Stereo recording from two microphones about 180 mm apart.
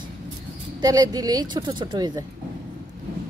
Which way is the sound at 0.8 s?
20° right (ahead or behind).